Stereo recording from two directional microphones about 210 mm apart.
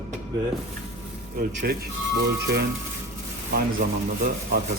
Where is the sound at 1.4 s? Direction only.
45° right (ahead or behind).